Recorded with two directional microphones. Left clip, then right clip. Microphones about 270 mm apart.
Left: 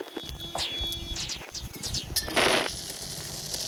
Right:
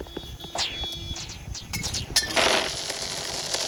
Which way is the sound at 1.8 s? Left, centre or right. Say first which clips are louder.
Right 6 dB; centre.